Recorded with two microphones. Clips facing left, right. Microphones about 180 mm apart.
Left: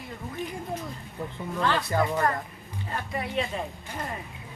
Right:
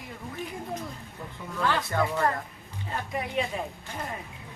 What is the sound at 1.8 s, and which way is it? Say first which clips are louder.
Speech: left 2 dB; 15° left (ahead or behind).